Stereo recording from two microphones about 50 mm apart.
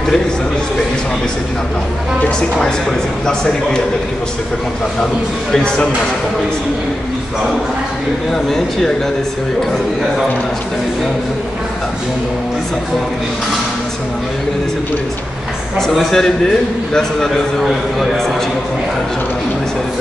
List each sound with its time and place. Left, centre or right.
3.3 s a man's voice: centre
8.3 s a man's voice: centre
15.9 s a man's voice: centre
16.2 s a man's voice: centre